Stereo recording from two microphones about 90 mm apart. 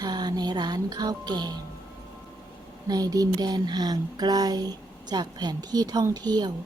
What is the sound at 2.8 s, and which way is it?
Speech, 45° right (ahead or behind).